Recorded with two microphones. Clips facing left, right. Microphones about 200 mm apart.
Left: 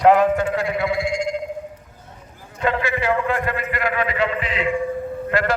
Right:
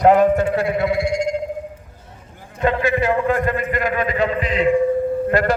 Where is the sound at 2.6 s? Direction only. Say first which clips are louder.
Right 4 dB; 40° right (ahead or behind).